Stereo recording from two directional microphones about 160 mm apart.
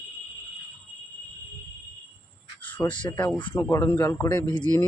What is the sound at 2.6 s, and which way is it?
Cricket, 10° left (ahead or behind).